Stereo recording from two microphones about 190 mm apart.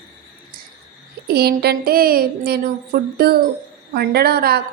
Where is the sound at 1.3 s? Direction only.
55° right (ahead or behind).